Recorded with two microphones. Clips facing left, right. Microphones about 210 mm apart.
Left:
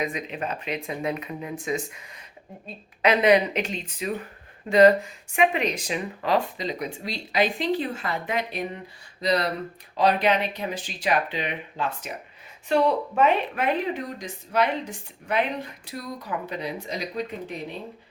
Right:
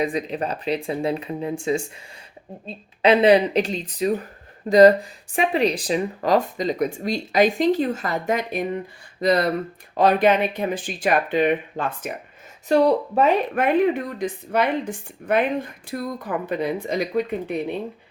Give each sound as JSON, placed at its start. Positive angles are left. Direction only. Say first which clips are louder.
{"t": 0.0, "sound": "speech", "louder": "right 5 dB", "side_deg": -35}
{"t": 12.6, "sound": "speech", "louder": "right 4 dB", "side_deg": -40}
{"t": 13.6, "sound": "speech", "louder": "right 7 dB", "side_deg": -60}